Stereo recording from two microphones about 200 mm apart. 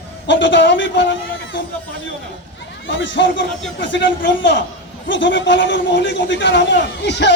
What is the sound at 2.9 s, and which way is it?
A man's voice, 65° left (ahead or behind).